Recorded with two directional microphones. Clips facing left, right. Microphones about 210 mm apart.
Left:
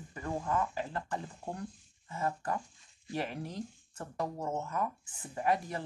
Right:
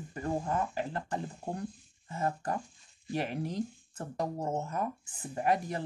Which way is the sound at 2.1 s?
40° right (ahead or behind).